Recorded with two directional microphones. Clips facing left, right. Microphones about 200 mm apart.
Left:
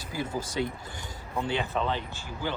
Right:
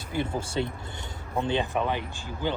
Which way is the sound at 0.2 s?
25° right (ahead or behind).